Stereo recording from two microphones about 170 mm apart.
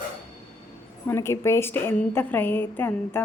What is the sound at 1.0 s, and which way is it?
A woman's voice, 15° left (ahead or behind).